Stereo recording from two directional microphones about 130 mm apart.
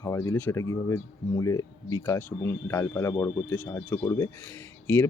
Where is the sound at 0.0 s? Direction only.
25° left (ahead or behind).